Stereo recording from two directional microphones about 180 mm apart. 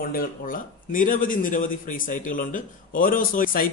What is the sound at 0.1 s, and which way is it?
Speech, 50° left (ahead or behind).